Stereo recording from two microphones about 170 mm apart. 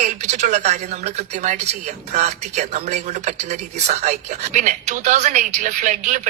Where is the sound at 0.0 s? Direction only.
40° right (ahead or behind).